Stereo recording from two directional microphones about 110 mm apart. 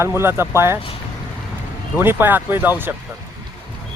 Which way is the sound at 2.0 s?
20° right (ahead or behind).